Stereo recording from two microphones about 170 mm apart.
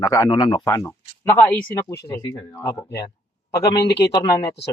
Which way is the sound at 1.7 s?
20° left (ahead or behind).